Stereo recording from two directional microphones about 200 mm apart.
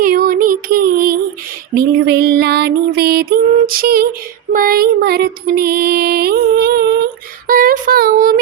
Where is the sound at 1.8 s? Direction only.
55° right (ahead or behind).